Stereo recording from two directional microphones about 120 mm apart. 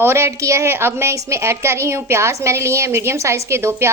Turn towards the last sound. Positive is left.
turn(degrees=-20)  # may be behind; listen again after turning